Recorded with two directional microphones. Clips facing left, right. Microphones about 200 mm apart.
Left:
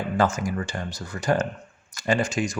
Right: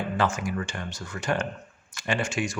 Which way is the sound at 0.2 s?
40° left (ahead or behind).